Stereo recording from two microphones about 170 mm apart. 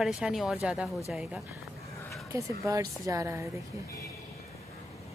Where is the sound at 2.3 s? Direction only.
20° right (ahead or behind).